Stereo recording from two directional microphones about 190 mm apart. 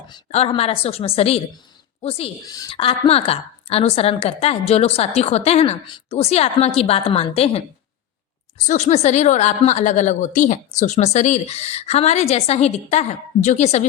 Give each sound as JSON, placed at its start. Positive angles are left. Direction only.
{"t": 0.3, "sound": "a woman's voice", "side_deg": 30}
{"t": 8.6, "sound": "a woman's voice", "side_deg": 40}